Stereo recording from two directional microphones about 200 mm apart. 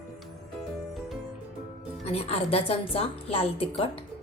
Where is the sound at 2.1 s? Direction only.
30° left (ahead or behind).